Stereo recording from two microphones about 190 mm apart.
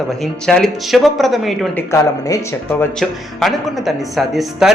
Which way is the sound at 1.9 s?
15° left (ahead or behind).